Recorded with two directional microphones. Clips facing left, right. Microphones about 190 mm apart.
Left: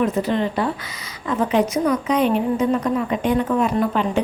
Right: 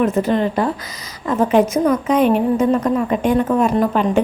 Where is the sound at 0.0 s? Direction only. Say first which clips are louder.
Right 3 dB; 50° right (ahead or behind).